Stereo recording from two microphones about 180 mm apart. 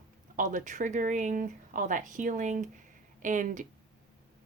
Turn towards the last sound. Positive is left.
turn(degrees=-45)  # may be behind; listen again after turning